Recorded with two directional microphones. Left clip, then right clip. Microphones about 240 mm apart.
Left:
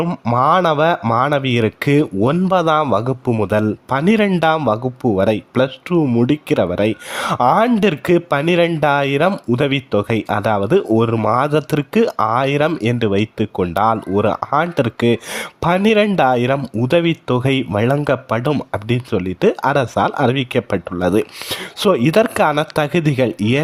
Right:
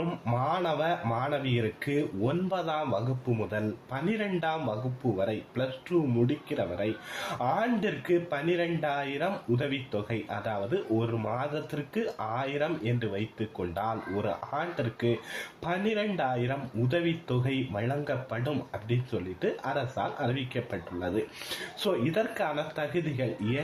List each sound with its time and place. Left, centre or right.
0.3 s speech: left